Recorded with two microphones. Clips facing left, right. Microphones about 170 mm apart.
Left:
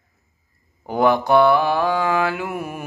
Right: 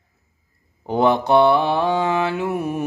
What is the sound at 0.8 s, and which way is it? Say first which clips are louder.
Mantra: even; 25° right (ahead or behind).